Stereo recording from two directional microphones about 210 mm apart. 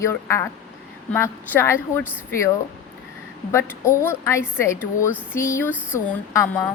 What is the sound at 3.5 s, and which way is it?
A woman's voice, 10° left (ahead or behind).